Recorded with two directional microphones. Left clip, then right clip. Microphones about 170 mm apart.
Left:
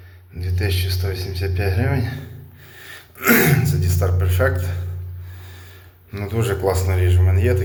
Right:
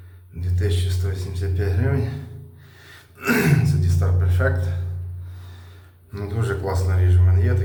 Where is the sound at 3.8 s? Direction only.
15° left (ahead or behind).